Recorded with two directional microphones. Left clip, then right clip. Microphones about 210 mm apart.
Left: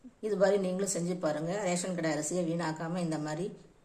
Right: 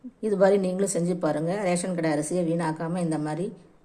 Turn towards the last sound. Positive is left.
turn(degrees=-15)  # may be behind; listen again after turning